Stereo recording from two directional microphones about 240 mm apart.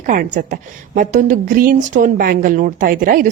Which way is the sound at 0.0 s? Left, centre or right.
Right.